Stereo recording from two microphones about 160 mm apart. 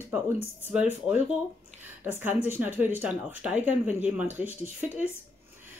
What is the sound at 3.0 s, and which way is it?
Speech, 10° right (ahead or behind).